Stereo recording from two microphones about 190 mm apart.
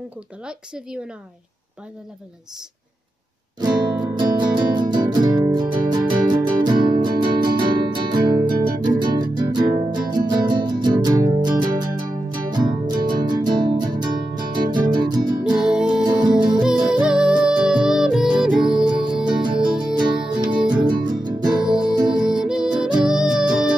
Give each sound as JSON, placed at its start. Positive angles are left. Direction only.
{"t": 0.5, "sound": "speech", "side_deg": -5}
{"t": 3.6, "sound": "music", "side_deg": -20}
{"t": 15.5, "sound": "music", "side_deg": -5}
{"t": 19.4, "sound": "music", "side_deg": -25}
{"t": 21.6, "sound": "music", "side_deg": -5}